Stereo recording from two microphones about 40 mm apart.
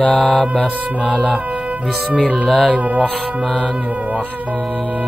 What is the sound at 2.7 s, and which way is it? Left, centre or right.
Music, right.